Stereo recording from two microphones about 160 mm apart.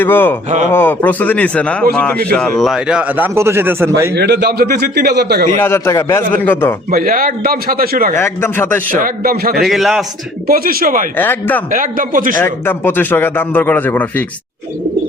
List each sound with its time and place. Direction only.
0.0 s a man's voice: 10° left (ahead or behind); by 4.1 s 15° right (ahead or behind)
4.1 s speech: 90° right
5.5 s a man's voice: 15° left (ahead or behind)
6.9 s a man's voice: 65° right (ahead or behind)
8.1 s a man's voice: 15° left (ahead or behind)
9.0 s a man's voice: 65° right (ahead or behind)
9.6 s a man's voice: centre (ahead or behind)
10.4 s a man's voice: 65° right (ahead or behind)
11.2 s a man's voice: 10° left (ahead or behind)
11.7 s a man's voice: 60° right (ahead or behind)
12.4 s a man's voice: 15° left (ahead or behind)